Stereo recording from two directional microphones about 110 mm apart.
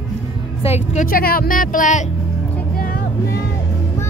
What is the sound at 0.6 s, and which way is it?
Speech, 70° left (ahead or behind).